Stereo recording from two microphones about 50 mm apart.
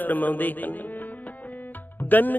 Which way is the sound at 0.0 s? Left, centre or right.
Left.